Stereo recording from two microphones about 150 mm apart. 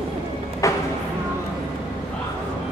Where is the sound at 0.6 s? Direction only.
20° left (ahead or behind).